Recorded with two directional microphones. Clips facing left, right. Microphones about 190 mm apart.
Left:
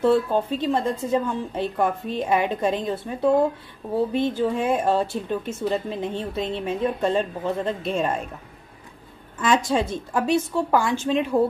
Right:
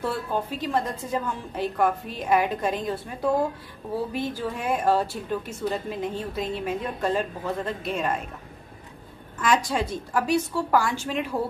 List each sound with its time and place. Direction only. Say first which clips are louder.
0.0 s speech: left 8 dB; 25° left (ahead or behind)
9.4 s speech: left 3 dB; 25° left (ahead or behind)